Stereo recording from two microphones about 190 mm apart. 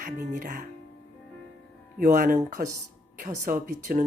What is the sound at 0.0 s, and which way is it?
Speech, 45° right (ahead or behind).